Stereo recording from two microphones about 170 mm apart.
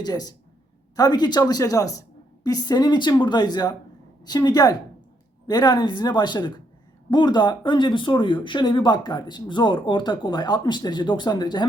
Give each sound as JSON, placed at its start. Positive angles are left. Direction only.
{"t": 0.0, "sound": "speech", "side_deg": 25}